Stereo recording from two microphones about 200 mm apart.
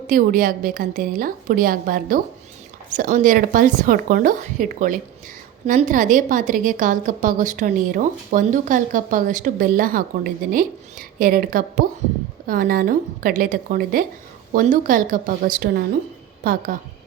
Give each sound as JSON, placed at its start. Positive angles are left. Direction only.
{"t": 0.1, "sound": "a woman's voice", "side_deg": -45}